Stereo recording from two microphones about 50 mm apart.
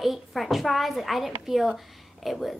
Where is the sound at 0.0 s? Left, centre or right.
Centre.